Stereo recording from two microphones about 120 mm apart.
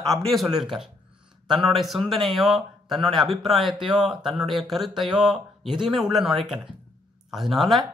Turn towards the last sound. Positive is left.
turn(degrees=0)  # may be behind; listen again after turning